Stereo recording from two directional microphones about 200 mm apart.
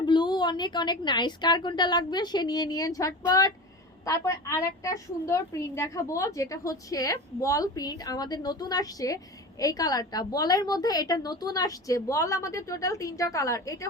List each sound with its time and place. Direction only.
0.0 s a woman's voice: 20° left (ahead or behind)